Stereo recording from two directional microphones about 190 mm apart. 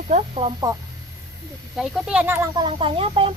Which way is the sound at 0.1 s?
35° right (ahead or behind).